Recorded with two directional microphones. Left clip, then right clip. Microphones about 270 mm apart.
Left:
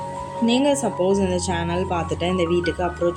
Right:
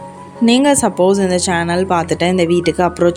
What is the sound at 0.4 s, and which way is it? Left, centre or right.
Speech, right.